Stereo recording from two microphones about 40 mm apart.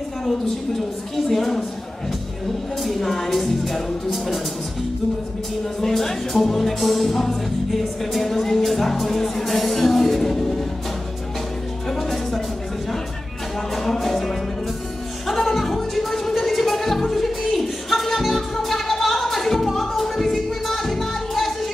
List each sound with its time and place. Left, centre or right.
1.1 s a woman's voice: centre
2.8 s music: centre
5.8 s music: centre
11.9 s music: centre
13.7 s music: centre